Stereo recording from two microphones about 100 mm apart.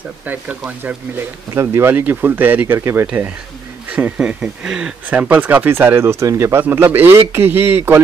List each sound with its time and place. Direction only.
0.2 s speech: 15° right (ahead or behind)
3.9 s speech: 15° right (ahead or behind)